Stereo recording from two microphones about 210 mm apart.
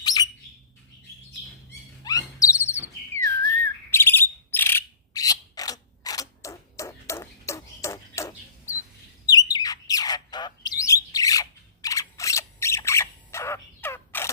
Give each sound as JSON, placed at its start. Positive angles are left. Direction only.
{"t": 0.0, "sound": "bird", "side_deg": 20}
{"t": 2.0, "sound": "wail", "side_deg": 15}
{"t": 3.9, "sound": "bird", "side_deg": 10}